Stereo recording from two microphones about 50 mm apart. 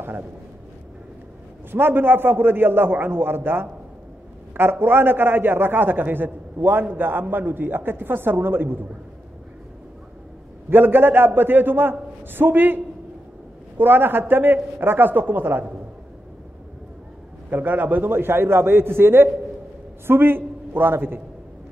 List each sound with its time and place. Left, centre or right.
1.7 s a man's voice: right
10.7 s a man's voice: right
17.5 s a man's voice: right